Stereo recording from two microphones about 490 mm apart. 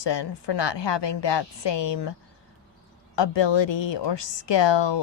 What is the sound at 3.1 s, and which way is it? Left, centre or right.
A woman's voice, left.